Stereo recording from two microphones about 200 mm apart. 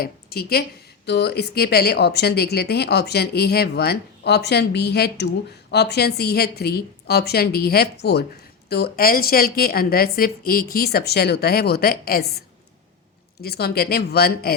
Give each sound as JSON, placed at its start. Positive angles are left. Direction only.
{"t": 0.0, "sound": "a woman's voice", "side_deg": 50}
{"t": 13.4, "sound": "a woman's voice", "side_deg": 50}